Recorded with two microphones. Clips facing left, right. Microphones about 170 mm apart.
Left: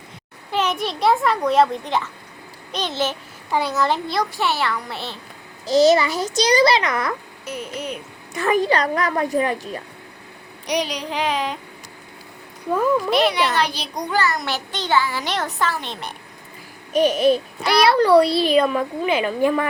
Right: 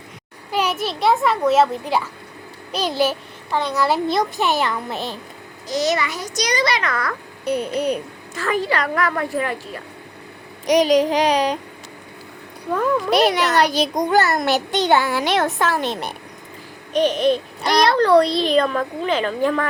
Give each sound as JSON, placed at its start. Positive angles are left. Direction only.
{"t": 0.5, "sound": "a child's voice", "side_deg": -10}
{"t": 3.5, "sound": "a child's voice", "side_deg": 5}
{"t": 4.1, "sound": "a child's voice", "side_deg": -20}
{"t": 5.6, "sound": "a child's voice", "side_deg": 30}
{"t": 7.4, "sound": "a child's voice", "side_deg": -35}
{"t": 8.3, "sound": "a child's voice", "side_deg": 15}
{"t": 10.7, "sound": "a child's voice", "side_deg": -45}
{"t": 13.1, "sound": "a child's voice", "side_deg": -40}
{"t": 16.9, "sound": "a child's voice", "side_deg": 10}